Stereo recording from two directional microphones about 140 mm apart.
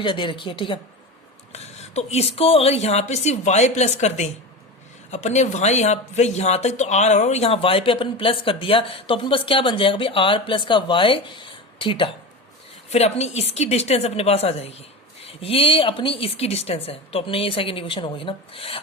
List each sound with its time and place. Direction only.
0.0 s speech: 35° left (ahead or behind)
1.5 s a woman's voice: 50° left (ahead or behind)
12.9 s a woman's voice: 50° left (ahead or behind)